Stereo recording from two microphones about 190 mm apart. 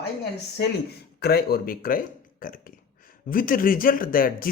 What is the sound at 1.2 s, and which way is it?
Speech, 55° left (ahead or behind).